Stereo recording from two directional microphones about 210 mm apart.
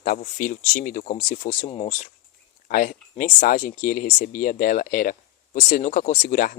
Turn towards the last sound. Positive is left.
turn(degrees=40)  # may be behind; listen again after turning